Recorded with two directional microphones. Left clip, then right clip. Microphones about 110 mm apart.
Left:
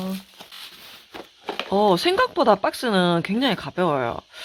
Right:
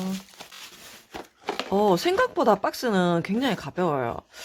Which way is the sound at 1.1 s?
10° right (ahead or behind).